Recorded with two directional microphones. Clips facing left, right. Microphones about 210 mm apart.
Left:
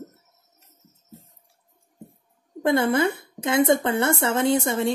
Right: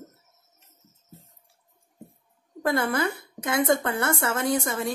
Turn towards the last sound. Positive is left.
turn(degrees=25)  # may be behind; listen again after turning